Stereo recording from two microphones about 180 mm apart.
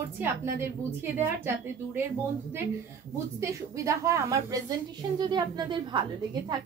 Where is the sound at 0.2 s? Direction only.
10° right (ahead or behind).